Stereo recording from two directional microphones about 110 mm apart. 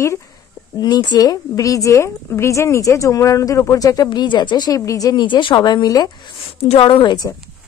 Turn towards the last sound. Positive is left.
turn(degrees=55)  # may be behind; listen again after turning